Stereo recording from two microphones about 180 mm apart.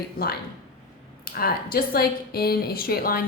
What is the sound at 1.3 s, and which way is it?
Speech, 55° left (ahead or behind).